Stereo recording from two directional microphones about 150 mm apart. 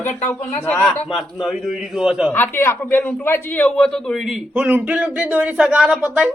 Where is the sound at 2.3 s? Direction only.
15° left (ahead or behind); by 6.3 s 5° right (ahead or behind).